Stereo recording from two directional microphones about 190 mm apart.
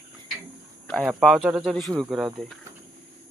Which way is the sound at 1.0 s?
Centre (ahead or behind).